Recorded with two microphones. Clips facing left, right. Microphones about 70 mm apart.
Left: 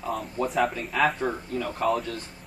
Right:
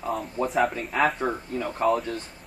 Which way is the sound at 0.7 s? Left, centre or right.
Right.